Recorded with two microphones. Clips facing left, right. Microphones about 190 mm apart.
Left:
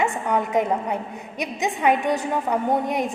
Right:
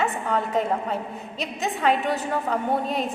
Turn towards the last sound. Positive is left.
turn(degrees=15)  # may be behind; listen again after turning